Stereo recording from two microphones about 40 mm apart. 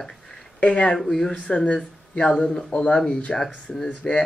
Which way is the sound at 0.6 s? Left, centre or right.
Left.